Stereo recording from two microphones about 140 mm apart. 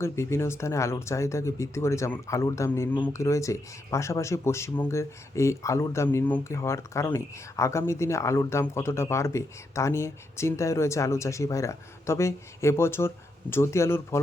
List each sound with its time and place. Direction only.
0.0 s speech: 20° left (ahead or behind)